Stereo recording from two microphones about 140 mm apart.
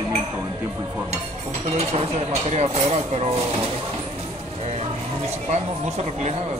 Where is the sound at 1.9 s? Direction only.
50° right (ahead or behind).